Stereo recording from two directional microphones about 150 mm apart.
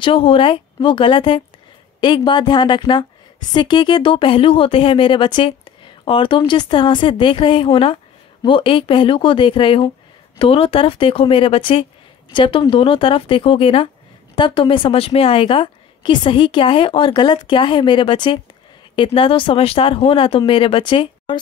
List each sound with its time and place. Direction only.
0.0 s a woman's voice: 35° left (ahead or behind)